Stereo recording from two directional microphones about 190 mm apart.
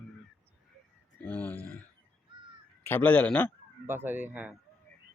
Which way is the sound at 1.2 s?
10° left (ahead or behind).